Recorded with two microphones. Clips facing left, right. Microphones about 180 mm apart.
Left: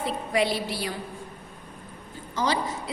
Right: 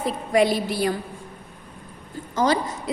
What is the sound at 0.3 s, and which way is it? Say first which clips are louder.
Speech: right 6 dB; 45° right (ahead or behind).